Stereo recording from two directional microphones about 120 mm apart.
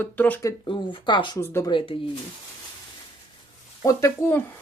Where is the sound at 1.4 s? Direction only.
20° left (ahead or behind).